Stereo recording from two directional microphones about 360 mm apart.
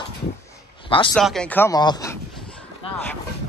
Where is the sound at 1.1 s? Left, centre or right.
Centre.